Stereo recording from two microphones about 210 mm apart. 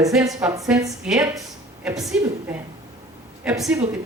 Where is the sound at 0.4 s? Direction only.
15° right (ahead or behind).